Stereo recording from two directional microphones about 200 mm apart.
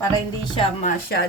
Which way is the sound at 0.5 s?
25° left (ahead or behind).